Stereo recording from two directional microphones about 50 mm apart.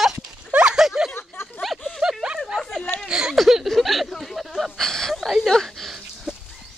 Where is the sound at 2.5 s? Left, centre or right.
Centre.